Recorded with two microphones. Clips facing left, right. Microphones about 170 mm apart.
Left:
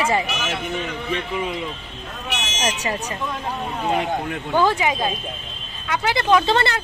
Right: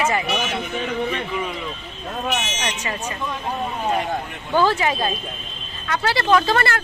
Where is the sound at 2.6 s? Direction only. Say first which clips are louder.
Left 3 dB; 35° left (ahead or behind).